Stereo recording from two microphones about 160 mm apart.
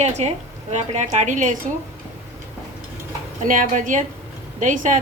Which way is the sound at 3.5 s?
55° right (ahead or behind).